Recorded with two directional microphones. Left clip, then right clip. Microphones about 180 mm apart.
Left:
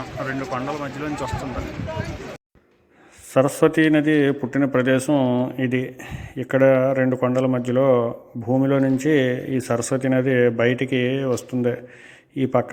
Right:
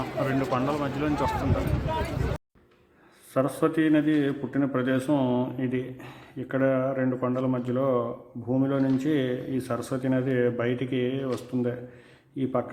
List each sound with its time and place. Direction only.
0.0 s a sound: centre (ahead or behind)
0.5 s speech: centre (ahead or behind)
3.3 s a man's voice: 25° left (ahead or behind)